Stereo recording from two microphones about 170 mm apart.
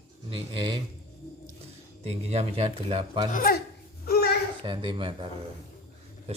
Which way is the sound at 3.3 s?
55° left (ahead or behind).